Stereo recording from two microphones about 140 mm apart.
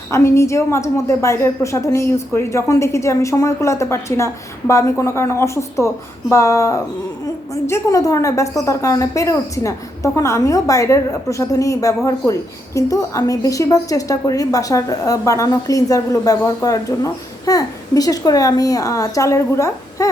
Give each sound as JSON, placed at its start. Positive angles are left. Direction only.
{"t": 0.1, "sound": "a woman's voice", "side_deg": 20}